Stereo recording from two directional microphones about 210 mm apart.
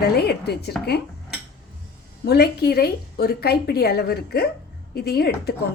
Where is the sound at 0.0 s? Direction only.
50° left (ahead or behind).